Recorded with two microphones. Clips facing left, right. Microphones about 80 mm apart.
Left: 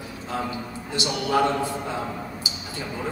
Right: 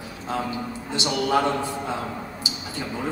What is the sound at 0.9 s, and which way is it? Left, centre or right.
Speech, right.